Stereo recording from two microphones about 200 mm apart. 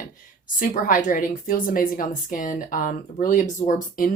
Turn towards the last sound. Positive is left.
turn(degrees=40)  # may be behind; listen again after turning